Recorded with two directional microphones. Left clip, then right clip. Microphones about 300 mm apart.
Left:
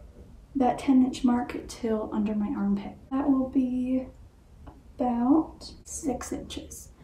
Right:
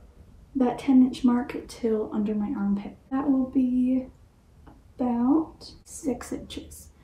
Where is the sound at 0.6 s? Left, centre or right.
Centre.